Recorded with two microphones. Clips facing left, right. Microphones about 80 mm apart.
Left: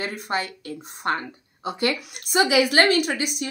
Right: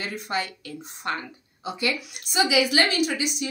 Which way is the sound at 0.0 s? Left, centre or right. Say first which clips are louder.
Left 2 dB; left.